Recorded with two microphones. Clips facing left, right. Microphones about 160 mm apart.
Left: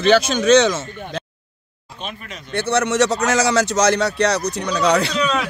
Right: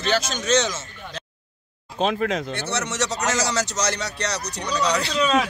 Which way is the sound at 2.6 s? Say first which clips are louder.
Left 9 dB; 55° left (ahead or behind).